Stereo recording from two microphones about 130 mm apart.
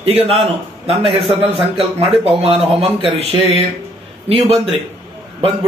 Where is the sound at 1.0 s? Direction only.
50° right (ahead or behind).